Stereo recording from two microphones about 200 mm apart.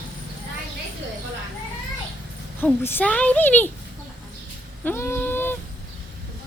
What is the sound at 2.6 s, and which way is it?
A woman's voice, 10° left (ahead or behind).